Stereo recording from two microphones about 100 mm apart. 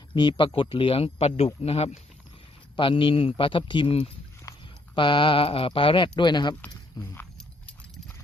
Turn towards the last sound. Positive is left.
turn(degrees=20)  # may be behind; listen again after turning